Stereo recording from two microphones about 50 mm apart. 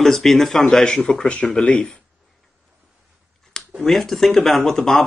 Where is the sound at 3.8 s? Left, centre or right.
Centre.